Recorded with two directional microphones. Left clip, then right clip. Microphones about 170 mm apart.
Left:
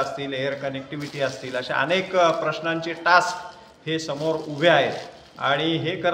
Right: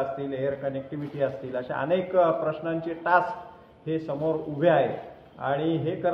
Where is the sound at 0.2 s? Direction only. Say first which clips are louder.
Left 2 dB; 45° left (ahead or behind).